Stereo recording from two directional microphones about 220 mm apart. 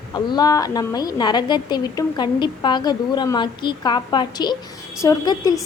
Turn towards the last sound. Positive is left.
turn(degrees=15)  # may be behind; listen again after turning